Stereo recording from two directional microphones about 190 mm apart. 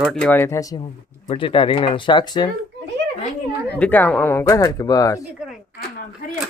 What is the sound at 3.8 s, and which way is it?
Speech, 10° left (ahead or behind).